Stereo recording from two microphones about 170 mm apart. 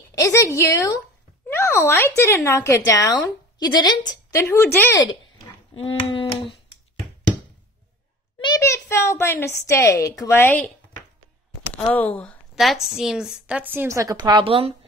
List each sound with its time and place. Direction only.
0.1 s speech: 20° left (ahead or behind)
5.8 s speech: 35° left (ahead or behind)
8.4 s a child's voice: 20° left (ahead or behind)
11.7 s a woman's voice: 10° left (ahead or behind); by 14.7 s 35° right (ahead or behind)